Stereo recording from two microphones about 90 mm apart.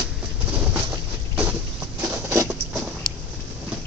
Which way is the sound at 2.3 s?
30° right (ahead or behind).